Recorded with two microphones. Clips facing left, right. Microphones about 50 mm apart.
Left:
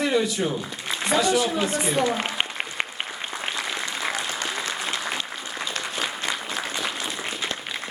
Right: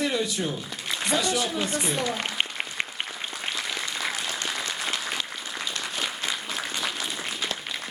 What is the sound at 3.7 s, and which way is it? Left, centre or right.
Applause, centre.